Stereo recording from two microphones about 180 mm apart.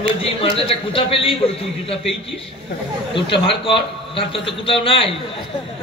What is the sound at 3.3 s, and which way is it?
A man's voice, 30° left (ahead or behind).